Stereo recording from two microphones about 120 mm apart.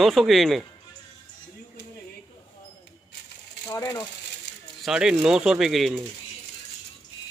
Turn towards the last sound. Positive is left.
turn(degrees=0)  # may be behind; listen again after turning